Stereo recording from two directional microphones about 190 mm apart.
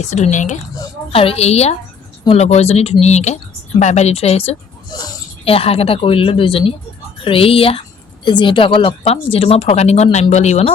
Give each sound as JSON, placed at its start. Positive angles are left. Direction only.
{"t": 0.0, "sound": "a woman's voice", "side_deg": 35}
{"t": 4.9, "sound": "a woman's voice", "side_deg": 20}